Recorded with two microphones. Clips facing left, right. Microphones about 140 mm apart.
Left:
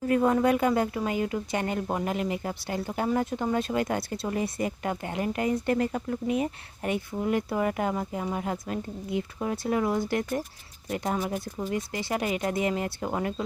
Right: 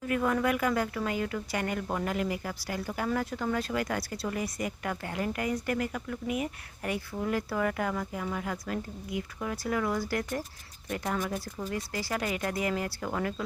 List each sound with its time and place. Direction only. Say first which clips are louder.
0.1 s speech: left 5 dB; 30° left (ahead or behind)